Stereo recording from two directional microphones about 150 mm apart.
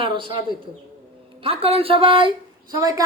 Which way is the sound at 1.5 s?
40° right (ahead or behind).